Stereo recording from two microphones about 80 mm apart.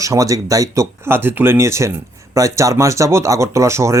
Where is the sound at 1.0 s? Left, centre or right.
Right.